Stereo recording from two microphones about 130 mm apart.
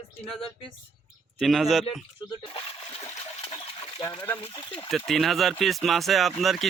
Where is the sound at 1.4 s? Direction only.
Centre (ahead or behind).